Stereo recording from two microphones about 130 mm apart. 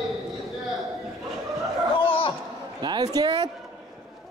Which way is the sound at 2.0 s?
40° left (ahead or behind).